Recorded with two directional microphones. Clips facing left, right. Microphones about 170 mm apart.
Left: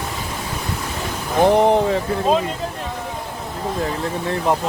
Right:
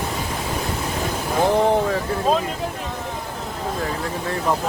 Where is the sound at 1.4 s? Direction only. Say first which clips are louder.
Left 4 dB; 20° left (ahead or behind).